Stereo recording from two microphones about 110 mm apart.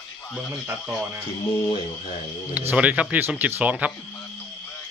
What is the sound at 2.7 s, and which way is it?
A man's voice, 10° right (ahead or behind).